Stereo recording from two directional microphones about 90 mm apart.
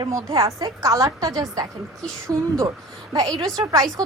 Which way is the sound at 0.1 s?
35° right (ahead or behind).